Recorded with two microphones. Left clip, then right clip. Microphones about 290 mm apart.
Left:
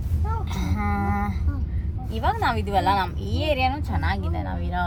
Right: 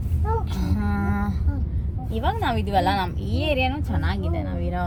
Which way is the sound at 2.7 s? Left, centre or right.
Centre.